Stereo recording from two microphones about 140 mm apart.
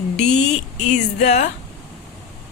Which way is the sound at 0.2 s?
55° left (ahead or behind).